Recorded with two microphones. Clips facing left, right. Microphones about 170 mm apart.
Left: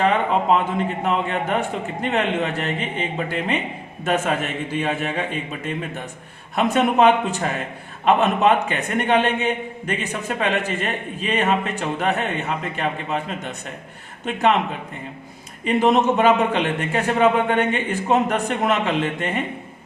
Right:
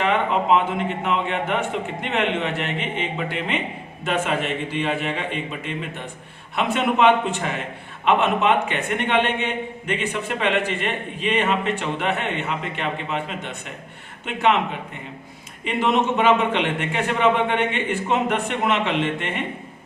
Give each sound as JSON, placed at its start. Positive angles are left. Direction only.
{"t": 0.0, "sound": "a man's voice", "side_deg": 40}
{"t": 6.6, "sound": "a man's voice", "side_deg": 40}
{"t": 15.6, "sound": "a man's voice", "side_deg": 40}